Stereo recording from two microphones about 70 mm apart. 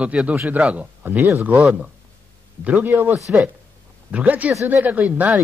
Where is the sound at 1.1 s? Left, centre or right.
Right.